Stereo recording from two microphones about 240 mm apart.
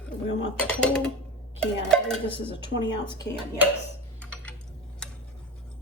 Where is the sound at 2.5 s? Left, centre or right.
Centre.